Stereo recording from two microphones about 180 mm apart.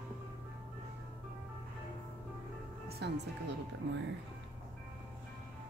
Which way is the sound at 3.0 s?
70° right (ahead or behind).